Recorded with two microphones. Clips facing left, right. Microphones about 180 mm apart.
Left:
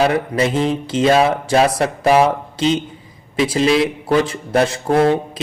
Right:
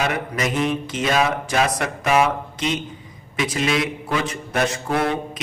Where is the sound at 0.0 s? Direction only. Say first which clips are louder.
Left 7 dB; 30° left (ahead or behind).